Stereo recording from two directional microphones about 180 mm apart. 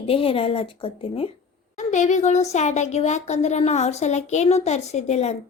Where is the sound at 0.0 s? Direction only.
30° left (ahead or behind).